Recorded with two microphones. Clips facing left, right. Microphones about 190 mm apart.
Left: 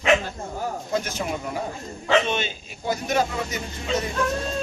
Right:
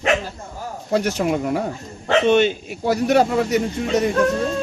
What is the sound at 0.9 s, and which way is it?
Speech, 65° right (ahead or behind).